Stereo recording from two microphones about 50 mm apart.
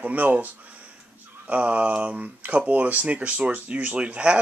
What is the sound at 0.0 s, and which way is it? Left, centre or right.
Speech, right.